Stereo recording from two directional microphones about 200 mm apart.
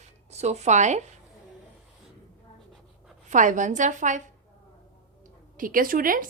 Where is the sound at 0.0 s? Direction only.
35° right (ahead or behind).